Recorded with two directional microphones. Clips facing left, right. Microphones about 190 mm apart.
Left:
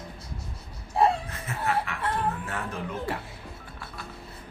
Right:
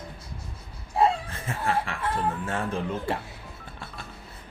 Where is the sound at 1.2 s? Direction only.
30° right (ahead or behind).